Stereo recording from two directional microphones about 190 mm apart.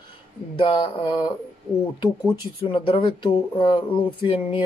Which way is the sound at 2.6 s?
25° left (ahead or behind).